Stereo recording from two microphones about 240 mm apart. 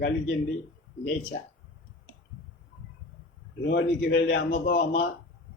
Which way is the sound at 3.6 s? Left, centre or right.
Left.